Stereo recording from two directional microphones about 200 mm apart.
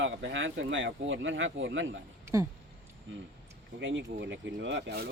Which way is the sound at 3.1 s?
70° right (ahead or behind).